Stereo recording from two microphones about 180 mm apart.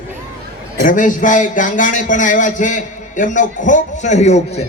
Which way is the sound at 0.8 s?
50° left (ahead or behind).